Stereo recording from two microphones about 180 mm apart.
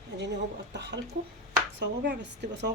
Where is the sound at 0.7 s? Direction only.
70° right (ahead or behind).